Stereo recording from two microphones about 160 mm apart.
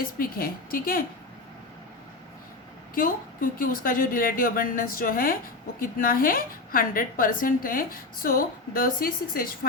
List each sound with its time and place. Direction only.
0.0 s a woman's voice: 65° left (ahead or behind)
2.9 s a woman's voice: 60° left (ahead or behind)